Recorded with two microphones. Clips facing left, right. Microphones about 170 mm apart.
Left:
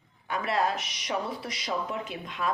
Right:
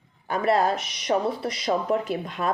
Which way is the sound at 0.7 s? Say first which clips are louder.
Right 5 dB; centre (ahead or behind).